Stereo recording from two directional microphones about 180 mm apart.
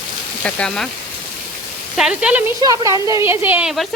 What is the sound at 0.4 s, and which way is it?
Speech, 5° left (ahead or behind).